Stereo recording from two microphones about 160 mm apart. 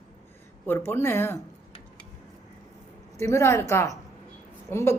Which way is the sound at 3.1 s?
20° left (ahead or behind).